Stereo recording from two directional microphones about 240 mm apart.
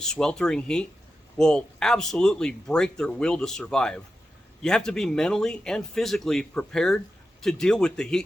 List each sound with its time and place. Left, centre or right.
0.0 s speech: centre